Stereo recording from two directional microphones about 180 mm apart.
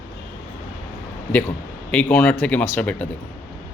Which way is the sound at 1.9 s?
5° left (ahead or behind).